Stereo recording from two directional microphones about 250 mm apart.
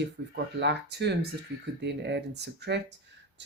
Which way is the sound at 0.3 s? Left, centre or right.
Right.